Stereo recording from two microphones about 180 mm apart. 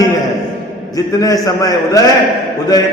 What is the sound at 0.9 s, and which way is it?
A man's voice, 20° left (ahead or behind).